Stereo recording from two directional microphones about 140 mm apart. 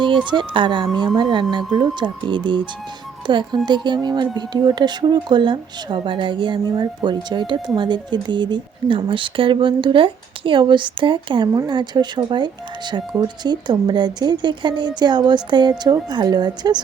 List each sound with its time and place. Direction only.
0.3 s speech: 35° right (ahead or behind)